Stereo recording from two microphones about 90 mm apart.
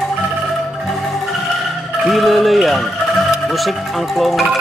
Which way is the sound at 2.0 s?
Centre (ahead or behind).